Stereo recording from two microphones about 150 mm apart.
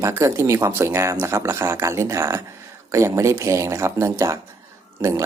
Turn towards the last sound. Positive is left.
turn(degrees=-20)  # may be behind; listen again after turning